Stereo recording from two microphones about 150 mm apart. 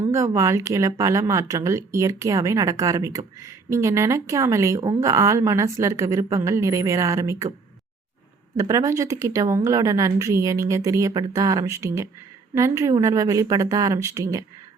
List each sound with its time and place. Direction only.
0.0 s speech: 20° right (ahead or behind)
8.5 s speech: 20° right (ahead or behind)